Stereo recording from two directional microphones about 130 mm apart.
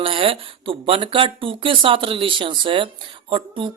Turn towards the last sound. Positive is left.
turn(degrees=-40)  # may be behind; listen again after turning